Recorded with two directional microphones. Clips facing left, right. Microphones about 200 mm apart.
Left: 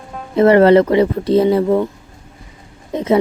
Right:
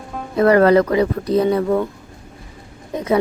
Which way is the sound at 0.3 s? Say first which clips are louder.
Left 3 dB; 25° left (ahead or behind).